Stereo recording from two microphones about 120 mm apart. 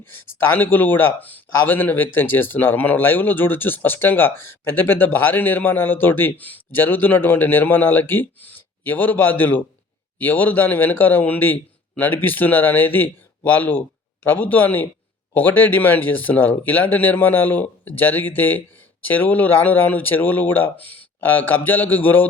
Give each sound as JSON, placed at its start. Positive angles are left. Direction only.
{"t": 0.1, "sound": "a man's voice", "side_deg": 15}